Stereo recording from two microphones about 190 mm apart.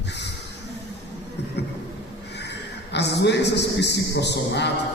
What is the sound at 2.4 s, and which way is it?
A man's voice, 65° left (ahead or behind).